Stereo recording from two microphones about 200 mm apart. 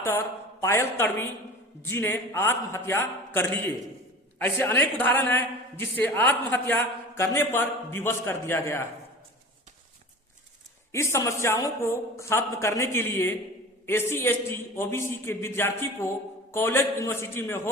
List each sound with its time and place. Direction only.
0.0 s a man's voice: 15° left (ahead or behind)
10.9 s a man's voice: 15° left (ahead or behind)